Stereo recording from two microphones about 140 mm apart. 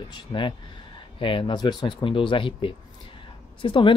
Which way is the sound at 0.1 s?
35° left (ahead or behind).